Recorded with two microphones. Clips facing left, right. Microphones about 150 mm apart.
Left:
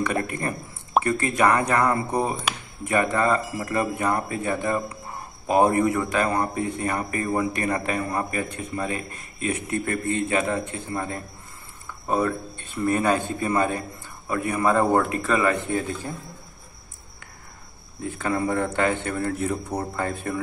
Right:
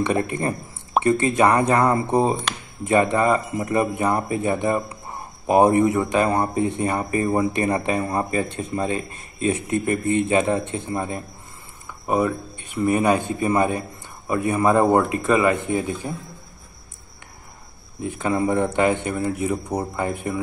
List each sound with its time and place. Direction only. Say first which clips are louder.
0.0 s a man's voice: right 4 dB; 25° right (ahead or behind)
18.0 s a man's voice: right 3 dB; 20° right (ahead or behind)